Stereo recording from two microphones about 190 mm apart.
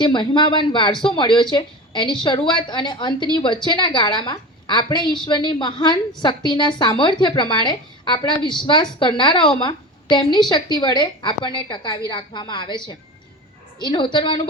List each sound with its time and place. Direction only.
0.0 s a woman's voice: 25° left (ahead or behind)